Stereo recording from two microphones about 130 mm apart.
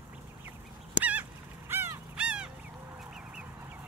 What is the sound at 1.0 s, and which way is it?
Crow, 10° right (ahead or behind).